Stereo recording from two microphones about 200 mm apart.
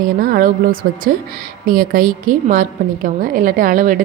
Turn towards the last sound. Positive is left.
turn(degrees=-45)  # may be behind; listen again after turning